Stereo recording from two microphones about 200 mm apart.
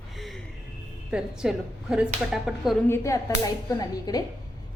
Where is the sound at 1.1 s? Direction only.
5° right (ahead or behind).